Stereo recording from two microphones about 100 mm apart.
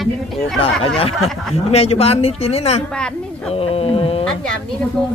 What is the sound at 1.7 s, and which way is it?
Speech, 85° left.